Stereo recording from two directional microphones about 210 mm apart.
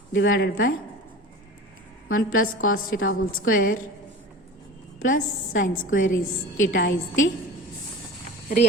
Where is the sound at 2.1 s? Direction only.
75° left (ahead or behind).